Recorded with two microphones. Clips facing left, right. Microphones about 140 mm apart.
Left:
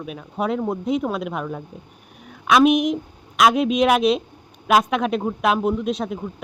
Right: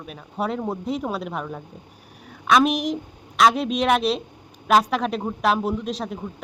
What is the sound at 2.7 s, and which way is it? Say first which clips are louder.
Speech: left 6 dB; 35° right (ahead or behind).